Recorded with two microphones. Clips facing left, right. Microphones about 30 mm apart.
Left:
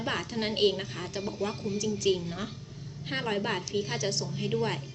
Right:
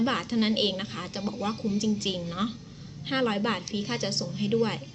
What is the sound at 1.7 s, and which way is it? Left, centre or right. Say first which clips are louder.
Speech: right 3 dB; right.